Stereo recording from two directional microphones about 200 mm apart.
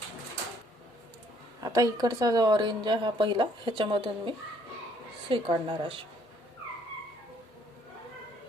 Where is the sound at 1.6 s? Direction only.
15° right (ahead or behind).